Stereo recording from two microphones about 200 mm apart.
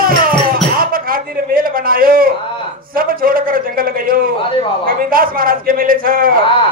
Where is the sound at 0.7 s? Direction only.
45° right (ahead or behind).